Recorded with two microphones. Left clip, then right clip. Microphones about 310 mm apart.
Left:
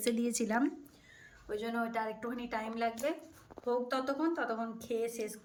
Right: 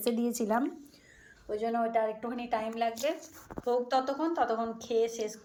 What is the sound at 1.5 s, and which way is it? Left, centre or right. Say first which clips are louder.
A woman's voice: right 6 dB; centre.